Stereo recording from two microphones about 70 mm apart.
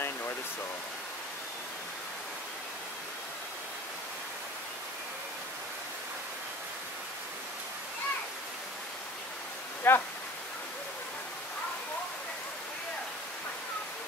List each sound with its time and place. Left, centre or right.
9.8 s speech: left